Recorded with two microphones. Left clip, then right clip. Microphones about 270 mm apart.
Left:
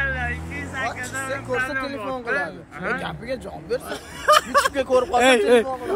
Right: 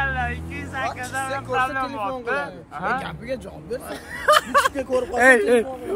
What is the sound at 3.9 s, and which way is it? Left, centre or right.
Speech, centre.